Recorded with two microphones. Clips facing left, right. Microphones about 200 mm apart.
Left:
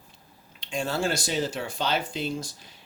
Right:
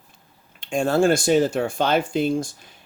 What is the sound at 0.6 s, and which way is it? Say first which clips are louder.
Speech: right 9 dB; 50° right (ahead or behind).